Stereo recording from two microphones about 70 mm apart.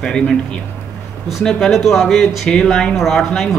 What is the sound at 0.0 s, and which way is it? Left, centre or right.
Speech, centre.